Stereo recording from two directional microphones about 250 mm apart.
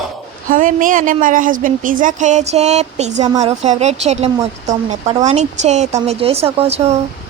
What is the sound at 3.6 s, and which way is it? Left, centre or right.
Speech, right.